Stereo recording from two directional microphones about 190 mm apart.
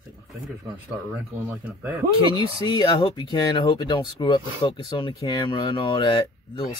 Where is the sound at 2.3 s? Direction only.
25° left (ahead or behind).